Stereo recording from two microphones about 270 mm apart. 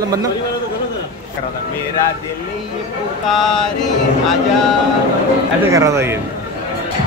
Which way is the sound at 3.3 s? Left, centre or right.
Centre.